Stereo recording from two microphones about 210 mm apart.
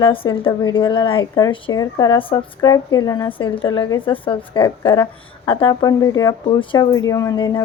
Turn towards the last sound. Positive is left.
turn(degrees=15)  # may be behind; listen again after turning